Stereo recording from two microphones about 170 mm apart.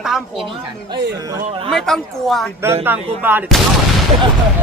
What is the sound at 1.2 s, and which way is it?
Speech, 20° right (ahead or behind).